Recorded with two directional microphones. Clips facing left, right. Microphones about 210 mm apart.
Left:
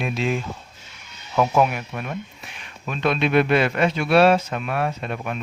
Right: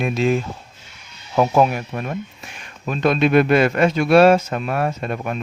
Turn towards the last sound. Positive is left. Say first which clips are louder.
# right 3 dB
turn(degrees=-40)  # may be behind; listen again after turning